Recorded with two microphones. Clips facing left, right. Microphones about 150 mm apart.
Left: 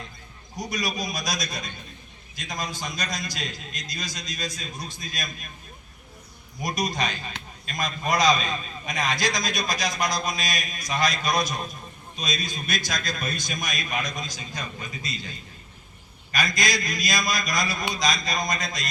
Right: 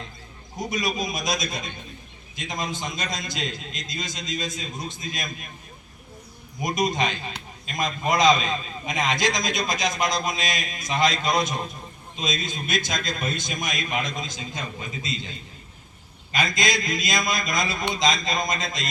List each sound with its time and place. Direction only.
0.5 s a man's voice: 25° right (ahead or behind)
6.6 s a man's voice: 20° right (ahead or behind)
16.3 s a man's voice: 20° right (ahead or behind)